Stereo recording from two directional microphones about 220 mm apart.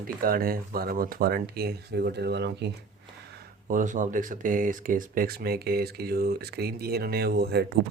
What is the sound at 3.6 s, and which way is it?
Speech, 35° right (ahead or behind).